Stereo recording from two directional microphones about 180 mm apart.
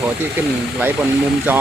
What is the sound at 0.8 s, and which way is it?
Speech, 10° right (ahead or behind).